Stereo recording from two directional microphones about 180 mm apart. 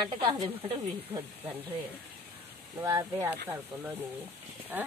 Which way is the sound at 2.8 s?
15° right (ahead or behind).